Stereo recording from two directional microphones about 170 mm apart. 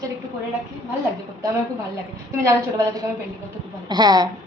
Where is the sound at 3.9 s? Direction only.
25° right (ahead or behind).